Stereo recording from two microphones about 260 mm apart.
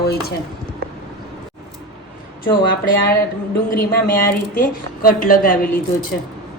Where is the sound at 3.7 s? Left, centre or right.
Left.